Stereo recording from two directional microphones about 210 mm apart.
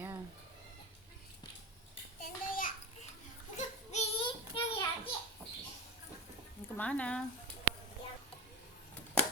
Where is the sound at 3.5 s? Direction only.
30° left (ahead or behind).